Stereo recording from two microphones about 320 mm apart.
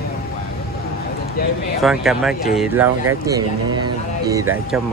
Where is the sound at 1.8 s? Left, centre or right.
Centre.